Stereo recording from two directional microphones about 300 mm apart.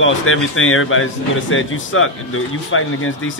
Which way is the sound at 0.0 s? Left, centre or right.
Left.